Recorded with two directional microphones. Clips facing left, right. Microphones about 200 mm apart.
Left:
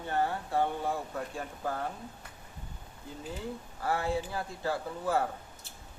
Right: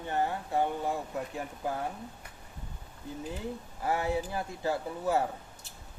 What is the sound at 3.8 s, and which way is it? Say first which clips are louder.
Speech: right 1 dB; 20° right (ahead or behind).